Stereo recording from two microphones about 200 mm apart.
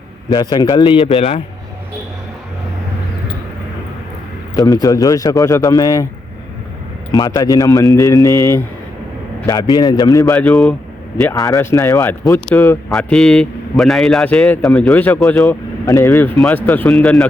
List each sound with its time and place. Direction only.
0.3 s a man's voice: 20° left (ahead or behind)
4.5 s speech: 15° left (ahead or behind)
7.1 s speech: 20° left (ahead or behind)
10.3 s a man's voice: 5° left (ahead or behind)
11.4 s a man's voice: 15° left (ahead or behind)
15.4 s speech: 15° left (ahead or behind)